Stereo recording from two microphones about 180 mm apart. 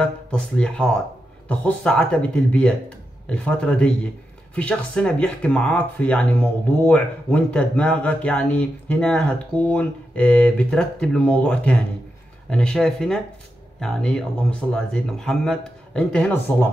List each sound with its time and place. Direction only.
0.0 s speech: 5° left (ahead or behind)